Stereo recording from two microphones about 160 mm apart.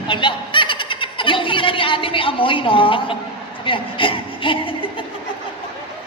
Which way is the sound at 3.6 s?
30° left (ahead or behind).